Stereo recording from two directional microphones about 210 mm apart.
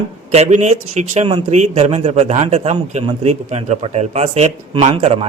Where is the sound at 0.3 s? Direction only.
30° right (ahead or behind).